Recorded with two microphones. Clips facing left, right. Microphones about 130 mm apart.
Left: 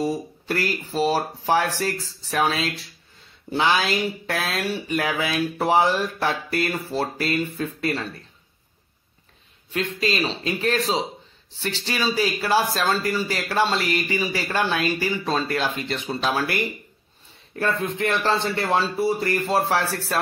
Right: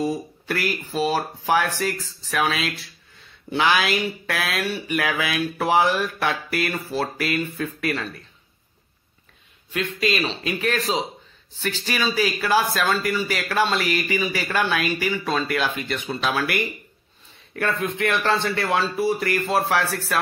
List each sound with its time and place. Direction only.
0.5 s speech: 30° left (ahead or behind)
9.7 s speech: 30° left (ahead or behind)
17.9 s speech: 30° left (ahead or behind)